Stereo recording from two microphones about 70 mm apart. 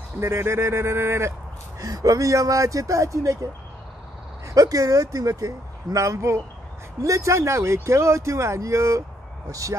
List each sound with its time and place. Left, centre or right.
0.2 s speech: right
1.8 s speech: right
4.6 s speech: right